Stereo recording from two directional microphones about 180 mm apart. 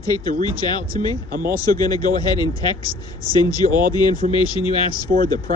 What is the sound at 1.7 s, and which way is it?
Speech, 20° left (ahead or behind).